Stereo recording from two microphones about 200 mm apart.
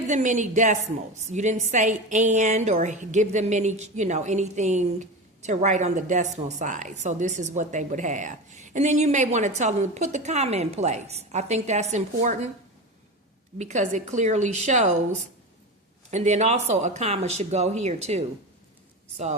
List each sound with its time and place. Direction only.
0.1 s a woman's voice: 40° right (ahead or behind)
13.6 s a woman's voice: 35° right (ahead or behind)